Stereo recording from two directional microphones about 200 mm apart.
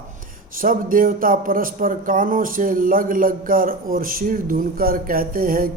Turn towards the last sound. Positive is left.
turn(degrees=-45)  # may be behind; listen again after turning